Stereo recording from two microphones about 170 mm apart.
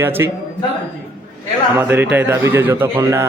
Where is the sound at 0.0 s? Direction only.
15° right (ahead or behind).